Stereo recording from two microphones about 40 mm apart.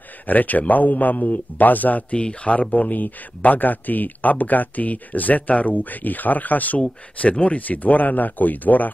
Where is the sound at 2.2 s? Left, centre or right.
Left.